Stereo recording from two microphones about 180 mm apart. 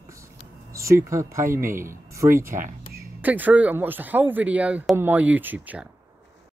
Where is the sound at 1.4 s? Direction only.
50° right (ahead or behind).